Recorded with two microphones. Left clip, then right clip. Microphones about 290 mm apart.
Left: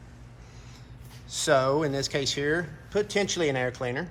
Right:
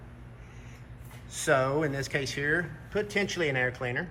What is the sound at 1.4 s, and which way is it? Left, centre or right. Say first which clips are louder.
Speech: left 3 dB; centre.